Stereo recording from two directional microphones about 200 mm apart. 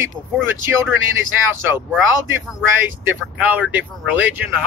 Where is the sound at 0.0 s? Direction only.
10° right (ahead or behind).